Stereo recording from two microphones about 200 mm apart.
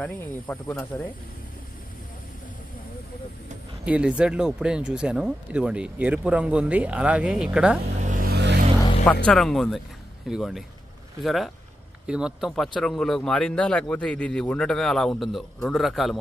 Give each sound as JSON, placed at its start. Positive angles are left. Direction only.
{"t": 0.0, "sound": "speech", "side_deg": 10}
{"t": 3.8, "sound": "speech", "side_deg": -5}
{"t": 8.0, "sound": "music", "side_deg": -40}
{"t": 9.0, "sound": "speech", "side_deg": 5}